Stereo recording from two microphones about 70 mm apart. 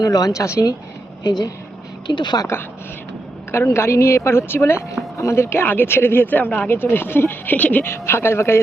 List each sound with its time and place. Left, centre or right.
0.0 s speech: left
0.3 s speech: left
1.2 s a woman's voice: left
3.5 s speech: left
7.9 s speech: left